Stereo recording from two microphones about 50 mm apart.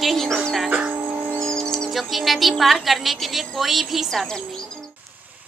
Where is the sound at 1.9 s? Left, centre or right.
Centre.